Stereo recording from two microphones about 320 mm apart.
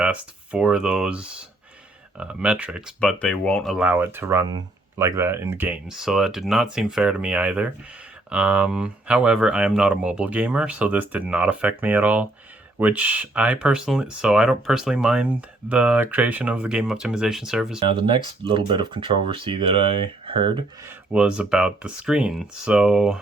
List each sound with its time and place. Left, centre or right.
0.0 s speech: centre
17.7 s speech: centre
21.1 s speech: centre